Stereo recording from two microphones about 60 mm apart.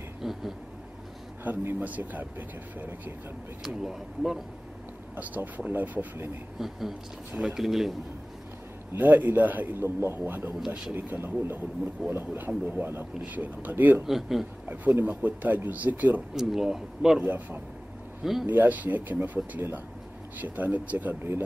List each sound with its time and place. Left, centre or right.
0.2 s a sound: centre
1.4 s speech: right
3.6 s speech: centre
5.1 s speech: right
6.6 s speech: centre
8.9 s speech: right
9.8 s speech: right
14.0 s speech: centre
14.7 s speech: right
16.3 s speech: centre
17.2 s speech: right
18.2 s speech: centre
18.5 s speech: right